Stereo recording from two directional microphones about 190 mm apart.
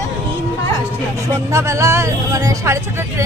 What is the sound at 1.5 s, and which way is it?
Speech, 15° right (ahead or behind).